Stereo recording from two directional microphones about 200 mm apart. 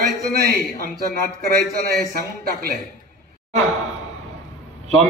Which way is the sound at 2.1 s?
50° right (ahead or behind).